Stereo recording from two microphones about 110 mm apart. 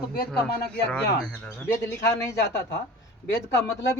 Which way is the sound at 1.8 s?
30° left (ahead or behind).